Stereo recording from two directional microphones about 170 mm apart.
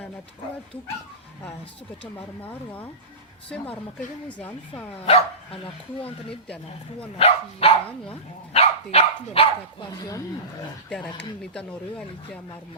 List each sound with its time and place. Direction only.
2.4 s speech: 10° left (ahead or behind)
4.3 s speech: 10° left (ahead or behind)
5.0 s dog: 35° left (ahead or behind)
7.2 s speech: 35° left (ahead or behind)
11.5 s speech: 5° left (ahead or behind)